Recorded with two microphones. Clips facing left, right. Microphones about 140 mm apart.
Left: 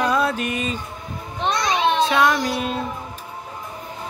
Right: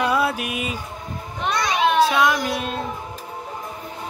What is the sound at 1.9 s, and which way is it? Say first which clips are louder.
Music: even; 5° right (ahead or behind).